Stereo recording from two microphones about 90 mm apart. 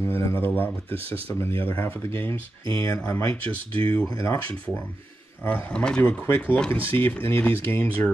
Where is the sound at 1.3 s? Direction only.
25° left (ahead or behind).